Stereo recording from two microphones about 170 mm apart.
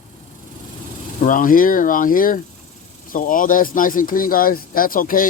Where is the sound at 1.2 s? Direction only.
50° left (ahead or behind).